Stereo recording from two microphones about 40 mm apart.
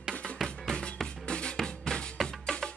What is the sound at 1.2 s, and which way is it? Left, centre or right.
Drum, left.